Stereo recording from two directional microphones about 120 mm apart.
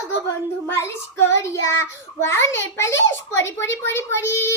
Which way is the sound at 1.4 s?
20° left (ahead or behind).